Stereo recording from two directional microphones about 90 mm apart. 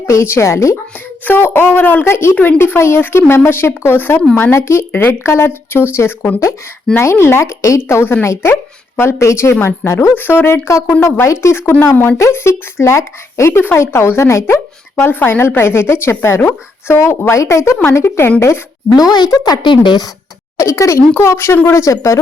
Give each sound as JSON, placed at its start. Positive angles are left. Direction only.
{"t": 0.1, "sound": "speech", "side_deg": 30}
{"t": 18.9, "sound": "speech", "side_deg": 45}
{"t": 20.6, "sound": "speech", "side_deg": 35}